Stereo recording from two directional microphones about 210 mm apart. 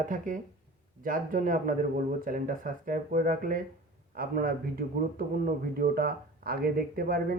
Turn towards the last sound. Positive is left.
turn(degrees=-45)  # may be behind; listen again after turning